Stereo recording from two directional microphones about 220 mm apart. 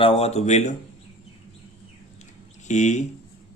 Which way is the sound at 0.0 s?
25° left (ahead or behind).